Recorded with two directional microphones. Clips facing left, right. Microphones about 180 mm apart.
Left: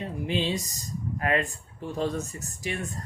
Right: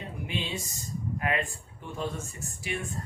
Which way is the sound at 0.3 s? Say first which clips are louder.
Left 7 dB; 35° left (ahead or behind).